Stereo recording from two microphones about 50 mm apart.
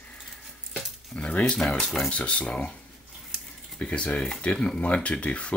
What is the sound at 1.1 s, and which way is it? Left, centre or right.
Speech, left.